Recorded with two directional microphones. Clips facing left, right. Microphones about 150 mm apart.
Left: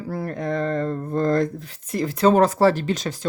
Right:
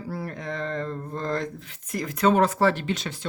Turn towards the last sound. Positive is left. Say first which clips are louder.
# left 5 dB
turn(degrees=40)  # may be behind; listen again after turning